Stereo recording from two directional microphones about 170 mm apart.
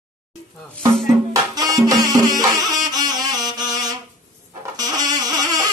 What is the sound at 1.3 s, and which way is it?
Music, 20° right (ahead or behind).